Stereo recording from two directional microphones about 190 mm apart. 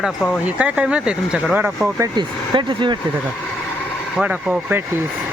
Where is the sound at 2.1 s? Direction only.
25° right (ahead or behind).